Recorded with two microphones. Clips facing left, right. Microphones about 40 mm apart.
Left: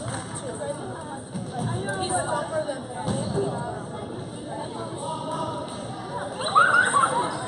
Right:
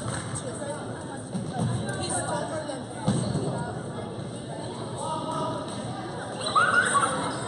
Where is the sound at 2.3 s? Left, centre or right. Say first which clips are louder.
Left 4 dB; centre.